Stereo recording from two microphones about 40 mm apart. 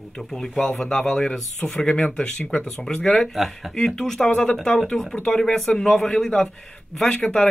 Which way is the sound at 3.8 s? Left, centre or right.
Centre.